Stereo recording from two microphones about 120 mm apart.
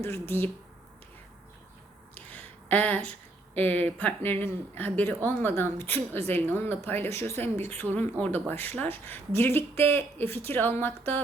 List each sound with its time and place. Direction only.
0.0 s speech: 20° left (ahead or behind)
2.1 s a sound: 15° left (ahead or behind)
3.5 s speech: 15° left (ahead or behind)